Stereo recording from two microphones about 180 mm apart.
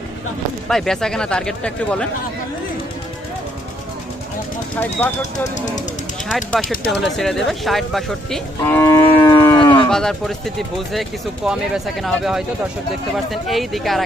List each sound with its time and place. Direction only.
0.7 s speech: centre (ahead or behind)
4.8 s cattle: 10° left (ahead or behind)
6.3 s speech: 5° left (ahead or behind)
8.6 s cattle: 15° left (ahead or behind)
9.9 s speech: 5° left (ahead or behind)